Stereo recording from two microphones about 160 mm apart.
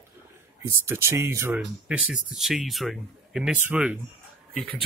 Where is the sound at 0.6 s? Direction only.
15° right (ahead or behind).